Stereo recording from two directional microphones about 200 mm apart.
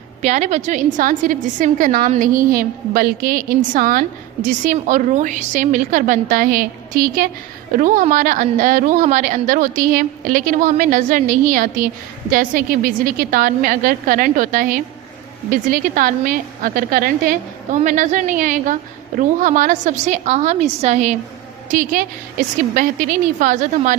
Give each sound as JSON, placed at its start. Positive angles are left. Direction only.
{"t": 0.2, "sound": "a woman's voice", "side_deg": -35}